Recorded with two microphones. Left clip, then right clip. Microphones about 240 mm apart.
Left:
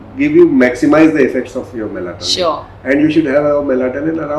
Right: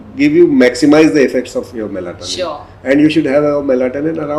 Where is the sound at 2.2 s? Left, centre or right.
Left.